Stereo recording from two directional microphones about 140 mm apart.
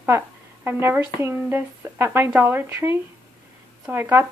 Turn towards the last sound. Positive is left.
turn(degrees=-15)  # may be behind; listen again after turning